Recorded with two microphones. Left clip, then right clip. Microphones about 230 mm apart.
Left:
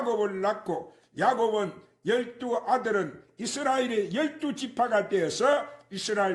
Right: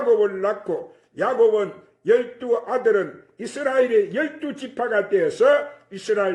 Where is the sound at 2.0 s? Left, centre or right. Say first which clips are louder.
Right 9 dB; left.